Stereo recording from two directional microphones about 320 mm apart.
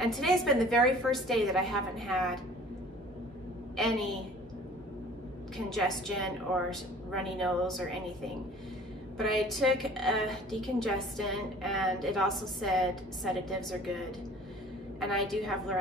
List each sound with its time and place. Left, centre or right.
0.0 s a woman's voice: centre
3.7 s a woman's voice: centre
5.7 s a woman's voice: centre
9.2 s a woman's voice: centre